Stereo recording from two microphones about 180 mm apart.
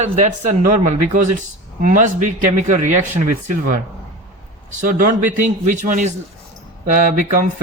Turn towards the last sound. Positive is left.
turn(degrees=-45)  # may be behind; listen again after turning